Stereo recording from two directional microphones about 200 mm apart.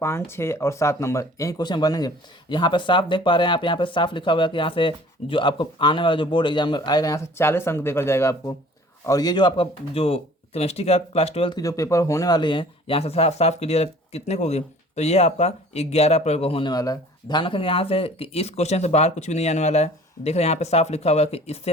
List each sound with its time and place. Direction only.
0.3 s speech: 15° left (ahead or behind); by 21.7 s 30° left (ahead or behind)